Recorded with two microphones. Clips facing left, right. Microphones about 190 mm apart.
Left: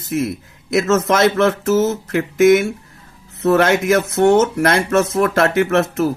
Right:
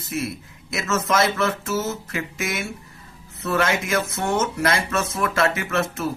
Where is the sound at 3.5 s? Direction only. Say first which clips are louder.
Left 8 dB; 55° left (ahead or behind).